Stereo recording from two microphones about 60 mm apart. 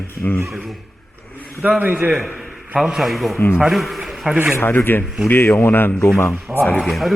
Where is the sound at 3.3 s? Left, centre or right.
Left.